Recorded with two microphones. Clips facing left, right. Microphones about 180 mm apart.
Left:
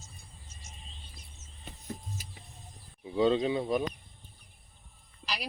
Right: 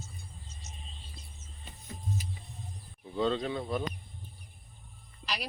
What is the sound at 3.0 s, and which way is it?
Speech, 10° left (ahead or behind).